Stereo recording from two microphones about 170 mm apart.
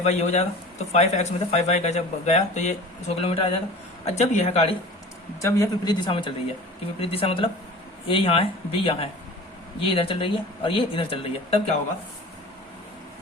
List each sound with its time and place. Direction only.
0.0 s speech: 40° left (ahead or behind)
5.4 s speech: 20° left (ahead or behind)